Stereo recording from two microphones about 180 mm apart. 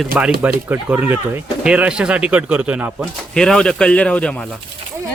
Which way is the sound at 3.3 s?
5° left (ahead or behind).